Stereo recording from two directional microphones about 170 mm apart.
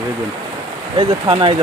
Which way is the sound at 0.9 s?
25° right (ahead or behind).